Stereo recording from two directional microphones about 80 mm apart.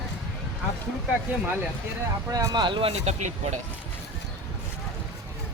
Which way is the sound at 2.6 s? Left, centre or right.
Right.